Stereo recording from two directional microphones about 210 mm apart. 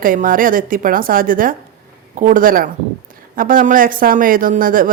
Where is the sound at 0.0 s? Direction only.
40° right (ahead or behind).